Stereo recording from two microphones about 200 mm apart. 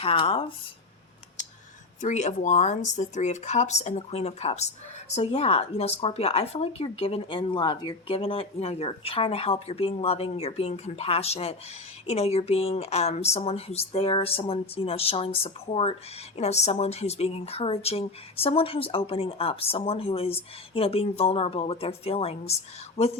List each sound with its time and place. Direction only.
0.0 s speech: 30° left (ahead or behind)
2.0 s speech: 35° left (ahead or behind)